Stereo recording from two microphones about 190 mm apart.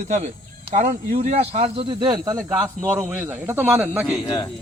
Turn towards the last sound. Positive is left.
turn(degrees=20)  # may be behind; listen again after turning